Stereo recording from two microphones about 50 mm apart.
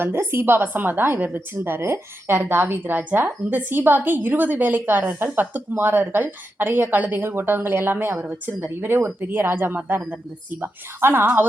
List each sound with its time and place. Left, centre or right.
0.0 s a woman's voice: right
10.1 s speech: right
11.0 s a woman's voice: right